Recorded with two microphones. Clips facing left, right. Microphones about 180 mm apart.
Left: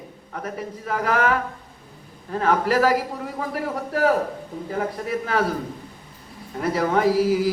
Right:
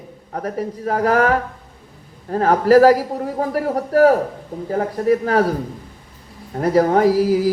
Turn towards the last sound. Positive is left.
turn(degrees=-40)  # may be behind; listen again after turning